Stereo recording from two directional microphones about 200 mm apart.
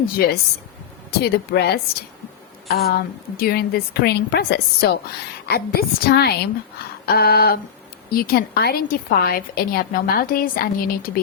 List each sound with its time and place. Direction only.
0.2 s a woman's voice: 45° left (ahead or behind)